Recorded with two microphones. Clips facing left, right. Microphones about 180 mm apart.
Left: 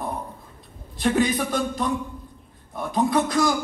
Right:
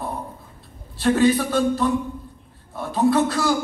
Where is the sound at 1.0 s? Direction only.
15° left (ahead or behind).